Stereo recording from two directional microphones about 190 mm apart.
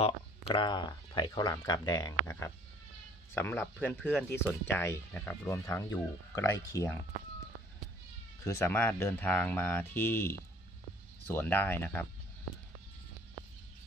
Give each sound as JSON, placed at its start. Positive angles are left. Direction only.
{"t": 0.5, "sound": "speech", "side_deg": 25}
{"t": 8.5, "sound": "speech", "side_deg": 15}